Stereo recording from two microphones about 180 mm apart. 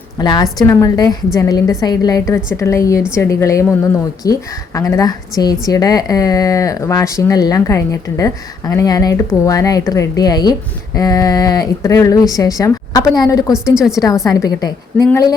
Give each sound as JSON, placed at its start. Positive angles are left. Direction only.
{"t": 0.2, "sound": "a woman's voice", "side_deg": 25}
{"t": 13.5, "sound": "a woman's voice", "side_deg": -5}
{"t": 14.3, "sound": "speech", "side_deg": 20}